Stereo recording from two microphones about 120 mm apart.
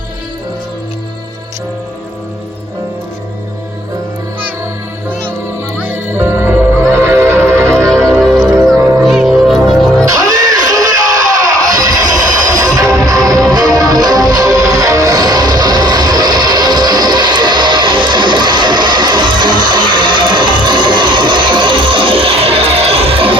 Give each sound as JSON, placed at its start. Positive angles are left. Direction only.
{"t": 5.8, "sound": "music", "side_deg": -15}
{"t": 8.4, "sound": "music", "side_deg": -5}
{"t": 8.7, "sound": "music", "side_deg": -30}
{"t": 9.0, "sound": "music", "side_deg": 0}
{"t": 10.1, "sound": "music", "side_deg": -30}